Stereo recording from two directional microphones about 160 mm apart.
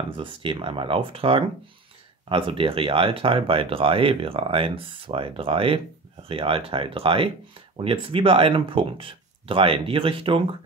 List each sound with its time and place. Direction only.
0.2 s speech: 30° right (ahead or behind)